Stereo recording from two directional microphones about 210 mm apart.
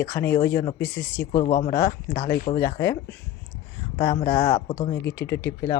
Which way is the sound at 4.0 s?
20° left (ahead or behind).